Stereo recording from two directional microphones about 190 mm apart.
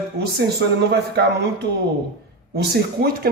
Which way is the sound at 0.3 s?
60° right (ahead or behind).